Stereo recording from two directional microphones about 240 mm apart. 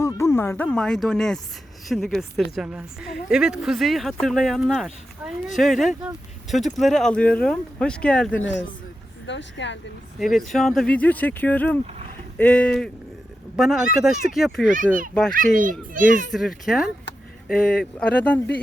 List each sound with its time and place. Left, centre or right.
0.0 s speech: centre
8.4 s speech: left
10.2 s speech: centre
15.3 s a child's voice: right
16.3 s speech: centre